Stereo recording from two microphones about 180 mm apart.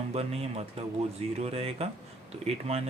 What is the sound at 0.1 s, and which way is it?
Speech, 35° right (ahead or behind).